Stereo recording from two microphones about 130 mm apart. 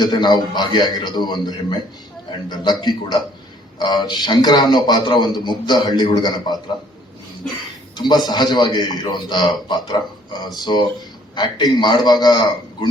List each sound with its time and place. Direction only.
0.0 s a man's voice: 35° left (ahead or behind)
7.9 s a man's voice: 35° left (ahead or behind)